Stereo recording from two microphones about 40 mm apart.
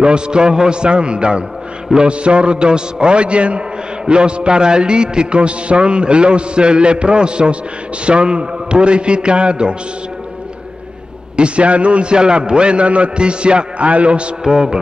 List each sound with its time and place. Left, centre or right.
0.0 s a man's voice: right
11.3 s a man's voice: right
14.4 s speech: centre